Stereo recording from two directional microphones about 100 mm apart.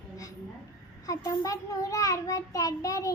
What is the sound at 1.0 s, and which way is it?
Child singing, 35° left (ahead or behind).